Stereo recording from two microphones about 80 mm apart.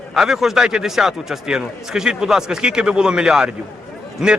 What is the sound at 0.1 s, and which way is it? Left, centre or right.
A man's voice, centre.